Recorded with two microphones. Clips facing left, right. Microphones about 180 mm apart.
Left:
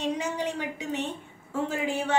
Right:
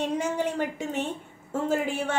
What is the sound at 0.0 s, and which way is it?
A woman's voice, 50° right (ahead or behind).